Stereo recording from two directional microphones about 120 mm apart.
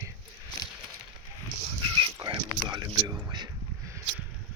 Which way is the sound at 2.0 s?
35° right (ahead or behind).